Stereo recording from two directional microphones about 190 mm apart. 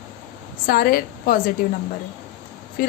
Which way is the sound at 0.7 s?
50° left (ahead or behind).